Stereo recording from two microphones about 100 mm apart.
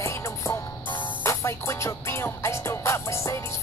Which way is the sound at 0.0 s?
25° left (ahead or behind).